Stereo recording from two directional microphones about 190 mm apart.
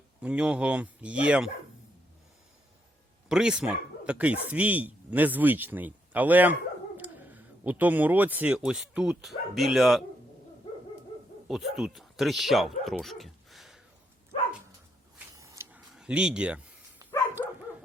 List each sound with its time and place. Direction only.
0.2 s speech: 5° right (ahead or behind)
3.2 s speech: 5° right (ahead or behind)
11.4 s speech: centre (ahead or behind)
15.4 s a sound: 15° right (ahead or behind)
16.0 s speech: 5° right (ahead or behind)
17.0 s dog: 20° right (ahead or behind)